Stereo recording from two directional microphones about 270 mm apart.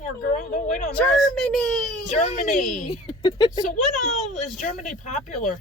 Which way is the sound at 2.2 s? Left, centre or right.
Left.